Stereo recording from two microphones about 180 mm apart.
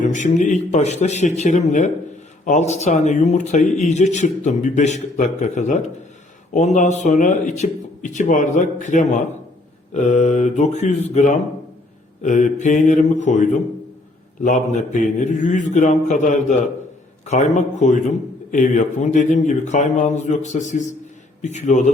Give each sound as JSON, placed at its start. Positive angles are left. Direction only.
{"t": 0.0, "sound": "speech", "side_deg": 45}